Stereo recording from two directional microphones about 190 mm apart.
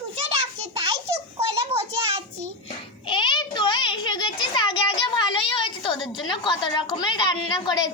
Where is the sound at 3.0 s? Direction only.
25° left (ahead or behind).